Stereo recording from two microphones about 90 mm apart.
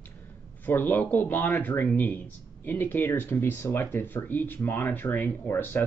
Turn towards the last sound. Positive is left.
turn(degrees=25)  # may be behind; listen again after turning